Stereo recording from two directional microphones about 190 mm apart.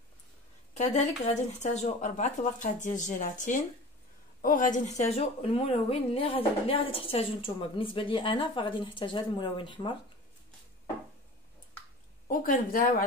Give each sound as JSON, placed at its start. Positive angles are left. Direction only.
{"t": 0.7, "sound": "speech", "side_deg": 35}
{"t": 12.3, "sound": "speech", "side_deg": 45}